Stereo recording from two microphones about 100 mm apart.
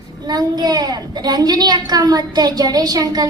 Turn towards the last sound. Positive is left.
turn(degrees=-40)  # may be behind; listen again after turning